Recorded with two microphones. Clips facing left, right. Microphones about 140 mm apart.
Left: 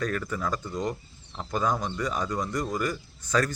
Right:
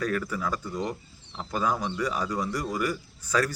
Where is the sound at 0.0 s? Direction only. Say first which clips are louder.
Right 1 dB; 5° right (ahead or behind).